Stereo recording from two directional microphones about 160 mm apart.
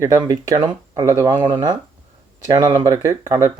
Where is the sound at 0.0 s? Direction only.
20° right (ahead or behind).